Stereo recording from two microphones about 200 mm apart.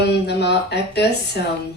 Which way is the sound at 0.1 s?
55° left (ahead or behind).